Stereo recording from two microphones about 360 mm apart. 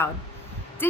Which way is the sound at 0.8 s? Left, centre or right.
Centre.